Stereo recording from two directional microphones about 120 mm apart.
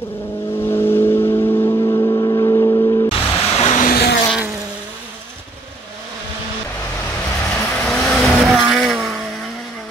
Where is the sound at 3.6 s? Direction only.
75° left (ahead or behind).